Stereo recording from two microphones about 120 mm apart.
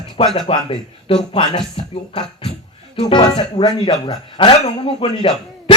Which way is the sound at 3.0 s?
40° left (ahead or behind).